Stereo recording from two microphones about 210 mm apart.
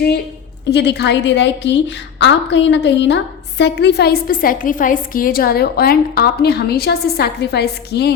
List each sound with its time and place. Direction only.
0.7 s a woman's voice: 55° left (ahead or behind)